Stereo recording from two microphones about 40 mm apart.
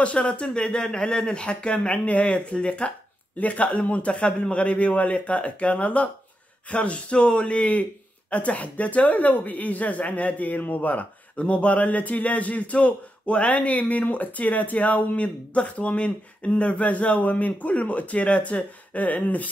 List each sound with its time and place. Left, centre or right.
0.0 s speech: left
0.6 s speech: left